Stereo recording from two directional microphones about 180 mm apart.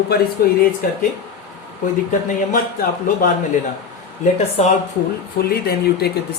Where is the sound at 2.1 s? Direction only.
50° left (ahead or behind).